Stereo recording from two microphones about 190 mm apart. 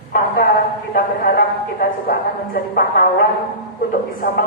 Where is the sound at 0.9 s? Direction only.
50° left (ahead or behind).